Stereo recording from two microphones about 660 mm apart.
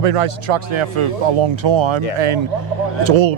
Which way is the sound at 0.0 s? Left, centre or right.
Right.